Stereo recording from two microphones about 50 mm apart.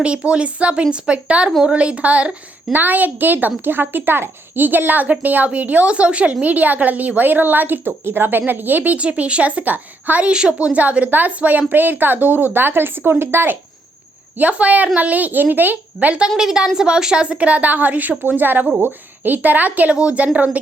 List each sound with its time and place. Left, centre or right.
0.2 s a woman's voice: right
9.0 s a woman's voice: right
14.3 s a woman's voice: right
16.4 s a woman's voice: centre; by 19.9 s right
19.9 s a woman's voice: right